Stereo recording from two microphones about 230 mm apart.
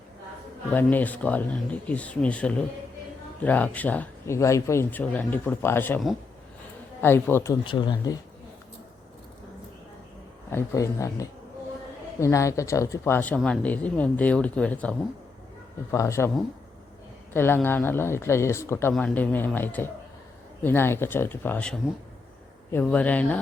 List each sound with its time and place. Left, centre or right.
0.7 s speech: centre
7.6 s speech: left
10.5 s speech: centre
17.3 s speech: centre